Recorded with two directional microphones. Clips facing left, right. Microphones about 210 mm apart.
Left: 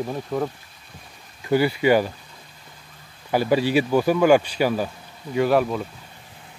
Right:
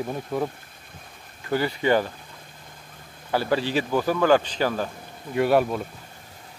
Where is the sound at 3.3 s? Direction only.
15° left (ahead or behind).